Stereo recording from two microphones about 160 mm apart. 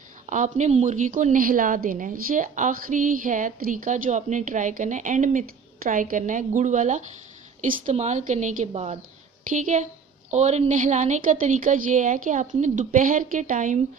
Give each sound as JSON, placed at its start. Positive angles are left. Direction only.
{"t": 0.3, "sound": "a woman's voice", "side_deg": -50}
{"t": 10.3, "sound": "a woman's voice", "side_deg": -45}